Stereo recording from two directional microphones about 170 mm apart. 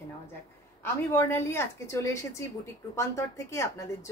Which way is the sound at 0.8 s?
15° left (ahead or behind).